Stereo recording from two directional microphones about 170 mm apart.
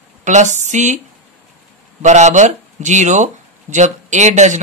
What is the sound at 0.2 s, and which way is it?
Speech, 45° right (ahead or behind).